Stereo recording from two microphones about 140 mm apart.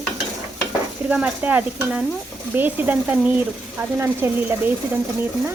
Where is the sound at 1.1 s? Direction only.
10° right (ahead or behind).